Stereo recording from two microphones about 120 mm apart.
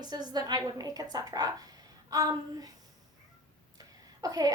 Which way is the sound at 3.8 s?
30° right (ahead or behind).